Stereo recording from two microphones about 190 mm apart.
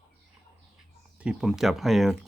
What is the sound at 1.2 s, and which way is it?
Speech, 5° right (ahead or behind).